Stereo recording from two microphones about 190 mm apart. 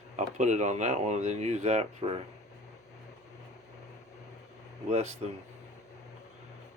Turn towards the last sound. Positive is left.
turn(degrees=-35)  # may be behind; listen again after turning